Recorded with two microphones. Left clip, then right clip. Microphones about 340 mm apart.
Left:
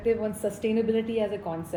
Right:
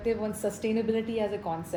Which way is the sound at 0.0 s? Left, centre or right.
Centre.